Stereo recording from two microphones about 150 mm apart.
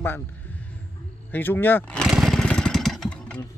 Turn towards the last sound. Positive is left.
turn(degrees=5)  # may be behind; listen again after turning